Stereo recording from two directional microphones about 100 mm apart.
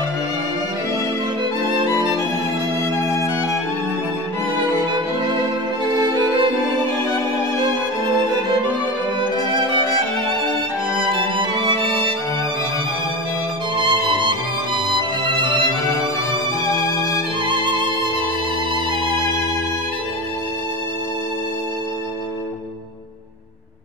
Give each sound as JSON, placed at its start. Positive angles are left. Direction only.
{"t": 5.9, "sound": "music", "side_deg": -50}
{"t": 9.5, "sound": "violin", "side_deg": -45}
{"t": 11.1, "sound": "music", "side_deg": -55}
{"t": 13.8, "sound": "music", "side_deg": -55}